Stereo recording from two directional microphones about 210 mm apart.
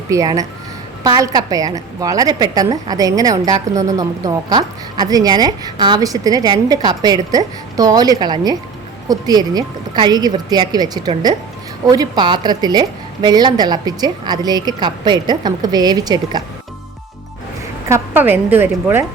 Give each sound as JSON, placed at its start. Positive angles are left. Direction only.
{"t": 0.1, "sound": "a woman's voice", "side_deg": -15}
{"t": 17.8, "sound": "speech", "side_deg": -10}